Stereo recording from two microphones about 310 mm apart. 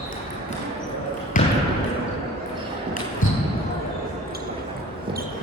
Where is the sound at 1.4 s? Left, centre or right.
Left.